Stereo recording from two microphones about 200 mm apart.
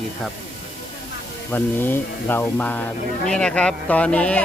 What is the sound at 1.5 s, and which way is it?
A man's voice, 10° left (ahead or behind).